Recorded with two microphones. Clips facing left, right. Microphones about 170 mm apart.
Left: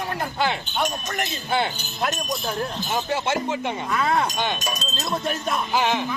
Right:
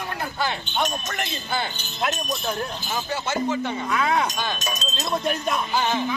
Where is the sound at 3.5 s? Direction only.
20° left (ahead or behind).